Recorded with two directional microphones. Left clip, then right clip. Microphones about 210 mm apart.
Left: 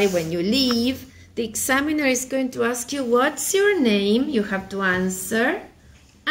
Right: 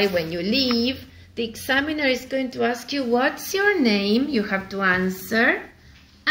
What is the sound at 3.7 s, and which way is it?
A woman's voice, 25° left (ahead or behind).